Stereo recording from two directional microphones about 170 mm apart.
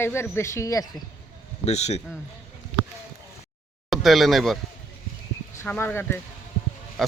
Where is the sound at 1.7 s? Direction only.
40° left (ahead or behind).